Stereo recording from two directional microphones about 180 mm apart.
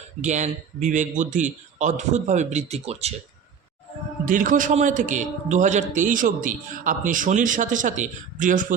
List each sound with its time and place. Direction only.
0.2 s a man's voice: 40° right (ahead or behind)
4.3 s a man's voice: 45° right (ahead or behind)